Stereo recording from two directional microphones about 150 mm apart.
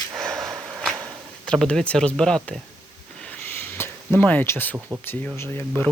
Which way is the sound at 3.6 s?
15° left (ahead or behind).